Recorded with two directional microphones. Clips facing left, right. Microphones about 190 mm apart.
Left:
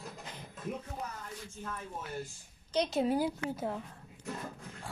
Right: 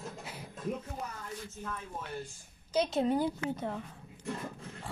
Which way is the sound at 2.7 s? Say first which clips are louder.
Right 1 dB; centre (ahead or behind).